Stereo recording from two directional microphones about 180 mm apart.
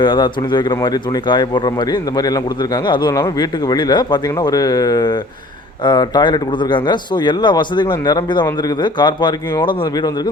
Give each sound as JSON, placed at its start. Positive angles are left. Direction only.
{"t": 0.0, "sound": "speech", "side_deg": 25}